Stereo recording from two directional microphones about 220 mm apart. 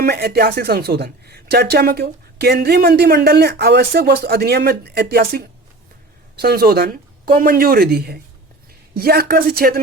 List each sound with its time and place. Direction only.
0.0 s speech: 45° right (ahead or behind)